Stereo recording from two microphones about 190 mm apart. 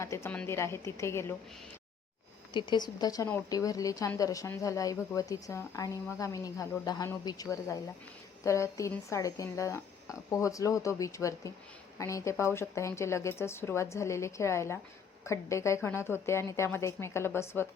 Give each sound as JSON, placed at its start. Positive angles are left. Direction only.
{"t": 0.0, "sound": "a woman's voice", "side_deg": 15}
{"t": 2.5, "sound": "a woman's voice", "side_deg": 25}